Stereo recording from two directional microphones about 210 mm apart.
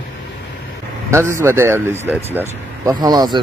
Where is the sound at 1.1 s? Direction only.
10° right (ahead or behind).